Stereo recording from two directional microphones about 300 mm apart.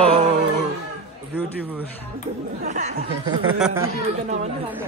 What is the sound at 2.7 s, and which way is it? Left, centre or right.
Speech, right.